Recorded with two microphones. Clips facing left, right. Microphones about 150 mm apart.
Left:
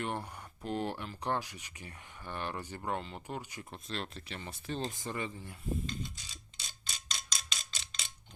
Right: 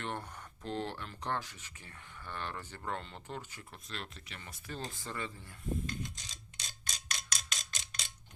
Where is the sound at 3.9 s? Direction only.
30° left (ahead or behind).